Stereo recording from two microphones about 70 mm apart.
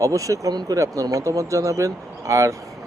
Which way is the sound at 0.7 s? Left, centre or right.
Right.